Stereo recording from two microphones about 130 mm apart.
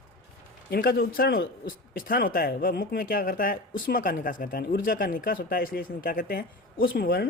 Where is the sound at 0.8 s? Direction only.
90° left.